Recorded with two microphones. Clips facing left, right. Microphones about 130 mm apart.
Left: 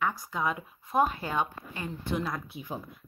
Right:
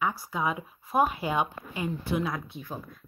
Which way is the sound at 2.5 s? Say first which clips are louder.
Left 1 dB; 15° left (ahead or behind).